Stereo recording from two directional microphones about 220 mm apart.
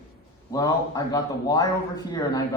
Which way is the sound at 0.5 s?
15° left (ahead or behind).